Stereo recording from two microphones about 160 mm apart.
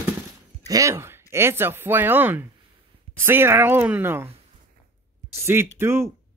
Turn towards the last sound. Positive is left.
turn(degrees=-15)  # may be behind; listen again after turning